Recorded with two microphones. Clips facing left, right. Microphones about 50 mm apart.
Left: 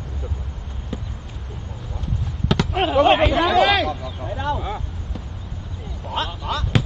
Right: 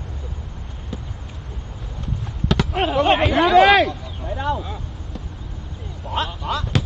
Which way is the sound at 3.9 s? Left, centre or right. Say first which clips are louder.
Left 4 dB; left.